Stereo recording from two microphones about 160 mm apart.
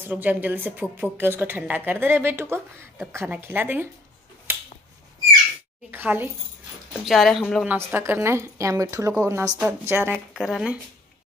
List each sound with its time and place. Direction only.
0.0 s a woman's voice: 10° right (ahead or behind)
5.9 s a woman's voice: 10° right (ahead or behind)
7.1 s speech: centre (ahead or behind)
7.6 s a woman's voice: 15° right (ahead or behind)
10.4 s speech: centre (ahead or behind)